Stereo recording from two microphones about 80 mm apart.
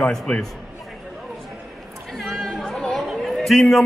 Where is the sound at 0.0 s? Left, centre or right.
Centre.